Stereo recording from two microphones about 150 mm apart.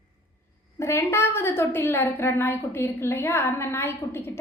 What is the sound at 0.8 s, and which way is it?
A woman's voice, 20° left (ahead or behind).